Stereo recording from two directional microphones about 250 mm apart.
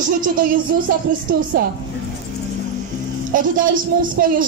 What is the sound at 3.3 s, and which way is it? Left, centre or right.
A woman's voice, right.